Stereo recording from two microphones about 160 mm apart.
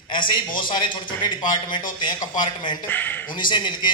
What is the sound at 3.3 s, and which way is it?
Speech, 30° left (ahead or behind).